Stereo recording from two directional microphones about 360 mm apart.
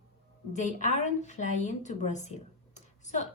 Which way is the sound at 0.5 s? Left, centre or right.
Left.